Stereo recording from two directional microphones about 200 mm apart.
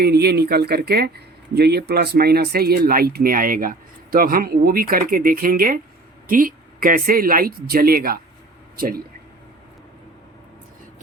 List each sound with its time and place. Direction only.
0.0 s speech: 55° right (ahead or behind)